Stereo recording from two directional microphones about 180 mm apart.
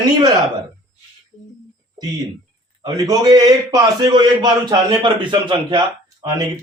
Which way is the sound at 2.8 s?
20° right (ahead or behind).